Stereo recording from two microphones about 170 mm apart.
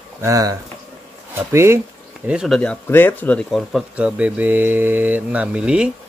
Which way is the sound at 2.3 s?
Centre (ahead or behind).